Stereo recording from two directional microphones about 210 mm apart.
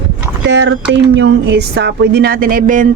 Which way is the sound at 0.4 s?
60° right (ahead or behind).